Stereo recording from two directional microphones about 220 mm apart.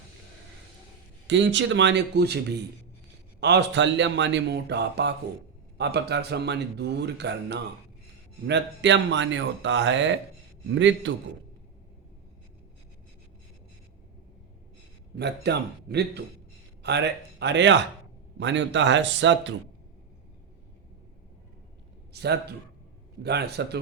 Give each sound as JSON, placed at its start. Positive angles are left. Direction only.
{"t": 1.3, "sound": "speech", "side_deg": -55}
{"t": 3.4, "sound": "speech", "side_deg": -50}
{"t": 15.1, "sound": "speech", "side_deg": -50}
{"t": 22.1, "sound": "a man's voice", "side_deg": -50}